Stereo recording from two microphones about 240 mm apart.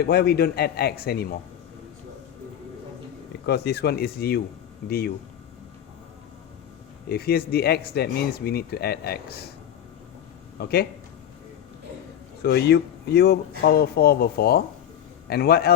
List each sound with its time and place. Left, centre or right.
0.0 s speech: left
3.4 s speech: left
7.1 s speech: left
10.6 s speech: left
12.4 s speech: left